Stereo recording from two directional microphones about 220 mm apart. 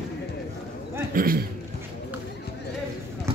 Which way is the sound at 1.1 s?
40° right (ahead or behind).